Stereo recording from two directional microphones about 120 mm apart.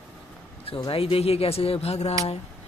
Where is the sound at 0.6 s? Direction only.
50° left (ahead or behind).